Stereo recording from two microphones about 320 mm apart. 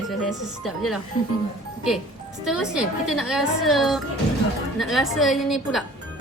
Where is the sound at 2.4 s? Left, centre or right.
Centre.